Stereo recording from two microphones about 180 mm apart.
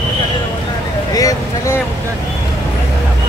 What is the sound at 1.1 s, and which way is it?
Vehicle, 20° left (ahead or behind).